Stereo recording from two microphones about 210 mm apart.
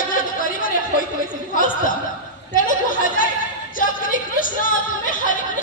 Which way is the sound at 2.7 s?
40° left (ahead or behind).